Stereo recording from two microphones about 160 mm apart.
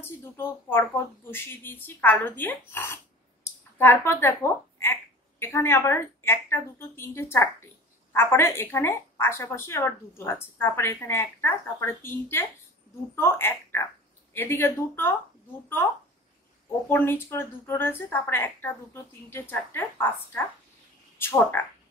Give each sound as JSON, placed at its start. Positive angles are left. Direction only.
{"t": 0.0, "sound": "a woman's voice", "side_deg": 15}